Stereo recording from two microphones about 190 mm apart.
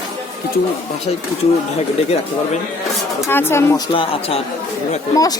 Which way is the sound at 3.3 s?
10° left (ahead or behind).